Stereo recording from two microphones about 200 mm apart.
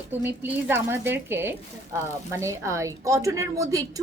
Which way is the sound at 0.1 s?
10° right (ahead or behind).